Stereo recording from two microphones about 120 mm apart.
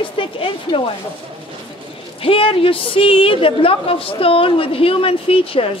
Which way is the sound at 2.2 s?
50° left (ahead or behind).